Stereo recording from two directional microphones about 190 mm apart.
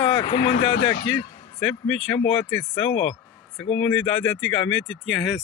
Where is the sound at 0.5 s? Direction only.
70° left (ahead or behind).